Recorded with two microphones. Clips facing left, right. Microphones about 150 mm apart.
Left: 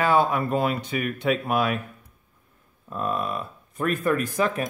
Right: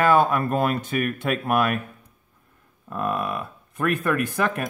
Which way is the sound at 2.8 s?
60° right (ahead or behind).